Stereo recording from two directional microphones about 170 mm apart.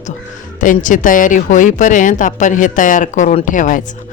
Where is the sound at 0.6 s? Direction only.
50° left (ahead or behind).